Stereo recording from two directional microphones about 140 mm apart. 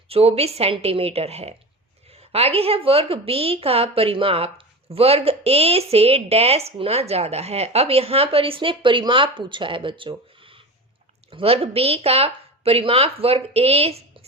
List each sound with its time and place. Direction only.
0.1 s a woman's voice: 45° right (ahead or behind)